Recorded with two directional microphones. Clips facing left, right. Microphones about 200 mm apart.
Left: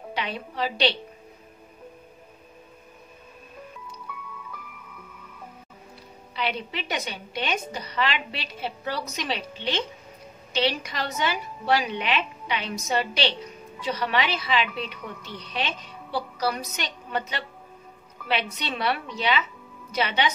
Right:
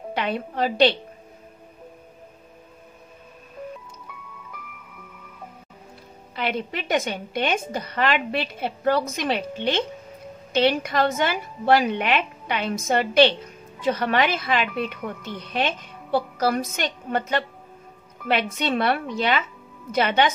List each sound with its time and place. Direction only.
0.1 s a woman's voice: 50° right (ahead or behind)
6.3 s a woman's voice: 50° right (ahead or behind)